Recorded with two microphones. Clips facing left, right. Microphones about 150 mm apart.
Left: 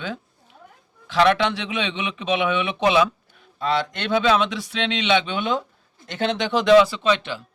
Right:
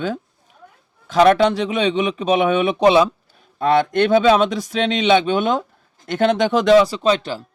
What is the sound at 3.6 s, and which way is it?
Speech, 55° right (ahead or behind).